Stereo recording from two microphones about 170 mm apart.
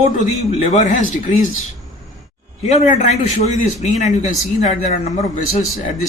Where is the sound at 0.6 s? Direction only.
40° left (ahead or behind).